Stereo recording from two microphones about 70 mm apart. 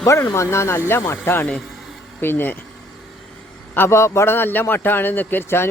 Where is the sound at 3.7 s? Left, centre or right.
Left.